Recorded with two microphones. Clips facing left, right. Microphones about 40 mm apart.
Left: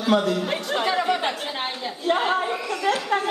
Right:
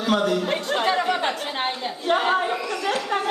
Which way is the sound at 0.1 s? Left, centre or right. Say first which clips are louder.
Left 1 dB; right.